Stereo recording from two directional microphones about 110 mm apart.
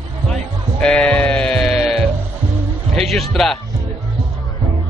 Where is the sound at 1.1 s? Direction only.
10° left (ahead or behind).